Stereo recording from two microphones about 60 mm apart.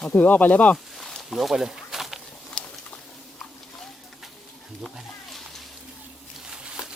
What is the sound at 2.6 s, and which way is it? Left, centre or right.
Patter, centre.